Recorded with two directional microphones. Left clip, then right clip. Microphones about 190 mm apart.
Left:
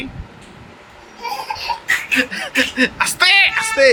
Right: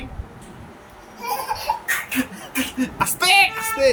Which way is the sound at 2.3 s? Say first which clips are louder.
Left 9 dB; 40° left (ahead or behind).